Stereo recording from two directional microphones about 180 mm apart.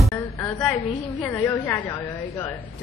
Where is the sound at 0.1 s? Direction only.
20° left (ahead or behind).